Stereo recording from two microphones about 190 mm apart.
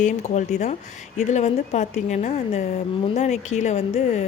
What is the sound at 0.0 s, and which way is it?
A woman's voice, 40° left (ahead or behind).